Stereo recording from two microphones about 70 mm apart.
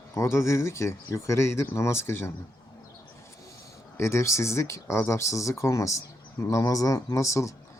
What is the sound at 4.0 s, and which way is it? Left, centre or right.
Speech, left.